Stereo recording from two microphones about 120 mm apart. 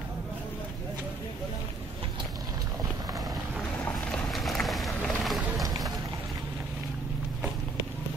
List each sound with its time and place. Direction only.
4.1 s vehicle: centre (ahead or behind)